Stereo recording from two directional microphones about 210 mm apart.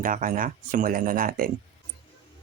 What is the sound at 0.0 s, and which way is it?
Speech, 40° right (ahead or behind).